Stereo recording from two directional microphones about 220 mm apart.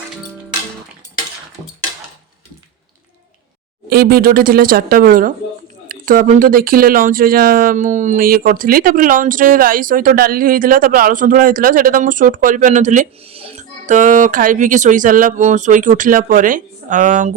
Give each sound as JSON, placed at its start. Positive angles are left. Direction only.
{"t": 3.8, "sound": "speech", "side_deg": -45}